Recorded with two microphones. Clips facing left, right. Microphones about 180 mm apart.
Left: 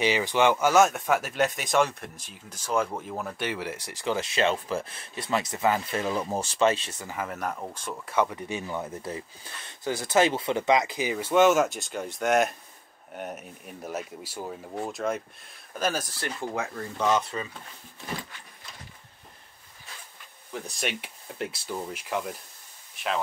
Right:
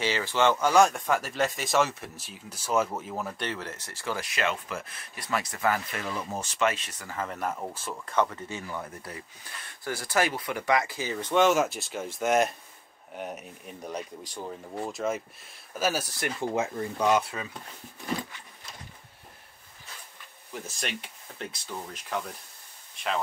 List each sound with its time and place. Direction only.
0.0 s speech: 15° left (ahead or behind); by 3.4 s centre (ahead or behind)
3.4 s speech: 10° left (ahead or behind)
7.2 s speech: centre (ahead or behind)
8.1 s speech: 10° left (ahead or behind); by 17.5 s 10° right (ahead or behind)
20.5 s speech: centre (ahead or behind)